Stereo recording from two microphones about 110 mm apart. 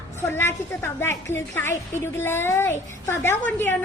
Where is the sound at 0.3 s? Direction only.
25° left (ahead or behind).